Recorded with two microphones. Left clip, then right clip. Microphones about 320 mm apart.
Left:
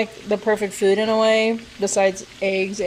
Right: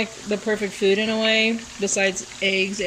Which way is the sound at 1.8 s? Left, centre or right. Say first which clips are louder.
Left 3 dB; left.